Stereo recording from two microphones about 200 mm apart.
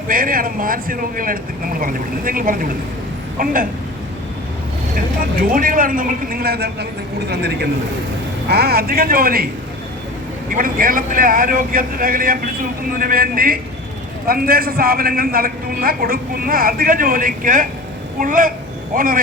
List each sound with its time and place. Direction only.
0.1 s a man's voice: 45° right (ahead or behind)
5.4 s a man's voice: 45° right (ahead or behind)
10.5 s a man's voice: 45° right (ahead or behind)